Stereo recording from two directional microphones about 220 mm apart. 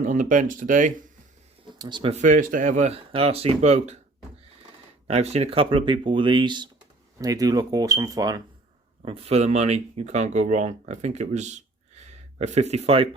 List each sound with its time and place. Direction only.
0.0 s speech: 35° right (ahead or behind)
1.8 s speech: 20° right (ahead or behind)
5.0 s speech: 30° right (ahead or behind)